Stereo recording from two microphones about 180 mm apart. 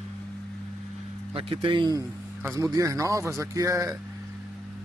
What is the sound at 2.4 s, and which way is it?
A man's voice, 15° right (ahead or behind).